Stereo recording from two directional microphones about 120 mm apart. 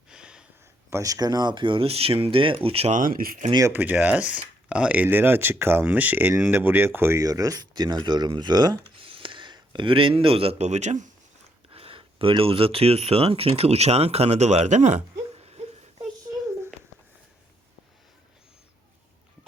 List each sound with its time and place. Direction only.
0.1 s a sound: 5° right (ahead or behind)
0.9 s speech: 25° right (ahead or behind); by 2.9 s 55° right (ahead or behind)
2.9 s speech: 90° right
3.7 s speech: 15° right (ahead or behind); by 11.1 s 85° right
11.7 s speech: 50° right (ahead or behind)